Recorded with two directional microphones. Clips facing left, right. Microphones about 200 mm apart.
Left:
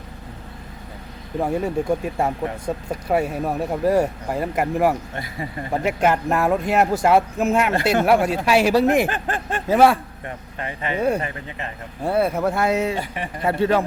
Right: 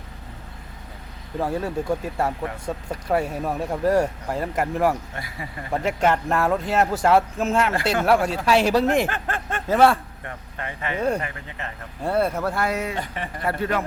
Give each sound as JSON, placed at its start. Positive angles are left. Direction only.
{"t": 1.4, "sound": "speech", "side_deg": 20}
{"t": 5.1, "sound": "speech", "side_deg": 25}
{"t": 5.8, "sound": "speech", "side_deg": 10}